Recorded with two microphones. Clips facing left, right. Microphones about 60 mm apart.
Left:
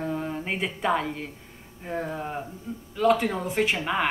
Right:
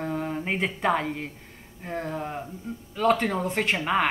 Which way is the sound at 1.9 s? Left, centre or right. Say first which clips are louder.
Even; centre.